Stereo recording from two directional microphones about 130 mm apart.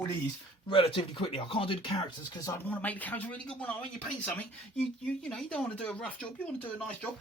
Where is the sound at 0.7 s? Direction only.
45° left (ahead or behind).